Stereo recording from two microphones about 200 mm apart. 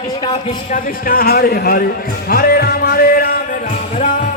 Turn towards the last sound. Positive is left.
turn(degrees=45)  # may be behind; listen again after turning